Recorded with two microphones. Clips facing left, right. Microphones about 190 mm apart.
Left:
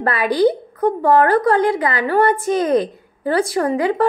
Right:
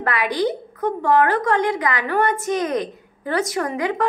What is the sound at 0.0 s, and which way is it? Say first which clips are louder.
A woman's voice: left 6 dB; 35° left (ahead or behind).